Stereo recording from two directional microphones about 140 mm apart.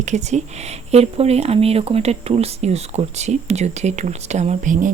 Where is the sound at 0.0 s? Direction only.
55° right (ahead or behind).